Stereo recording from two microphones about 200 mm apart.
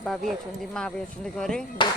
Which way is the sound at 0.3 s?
Centre (ahead or behind).